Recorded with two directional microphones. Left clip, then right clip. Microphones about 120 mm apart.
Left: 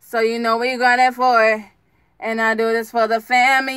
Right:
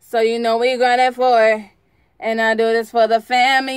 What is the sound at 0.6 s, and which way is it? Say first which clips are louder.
Speech: even; 35° right (ahead or behind).